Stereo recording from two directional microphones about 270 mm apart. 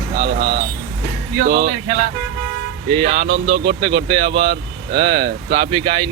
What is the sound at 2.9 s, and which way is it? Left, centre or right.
Speech, right.